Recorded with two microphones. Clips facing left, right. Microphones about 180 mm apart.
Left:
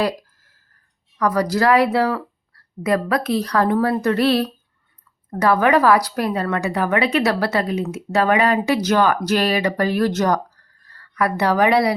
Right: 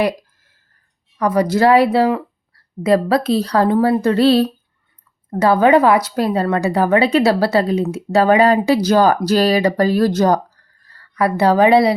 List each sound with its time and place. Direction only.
1.2 s a woman's voice: 25° right (ahead or behind)